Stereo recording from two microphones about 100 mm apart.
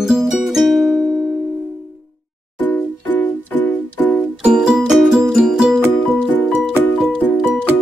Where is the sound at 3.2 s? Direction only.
15° left (ahead or behind).